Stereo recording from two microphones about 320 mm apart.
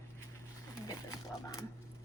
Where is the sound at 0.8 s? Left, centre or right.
Centre.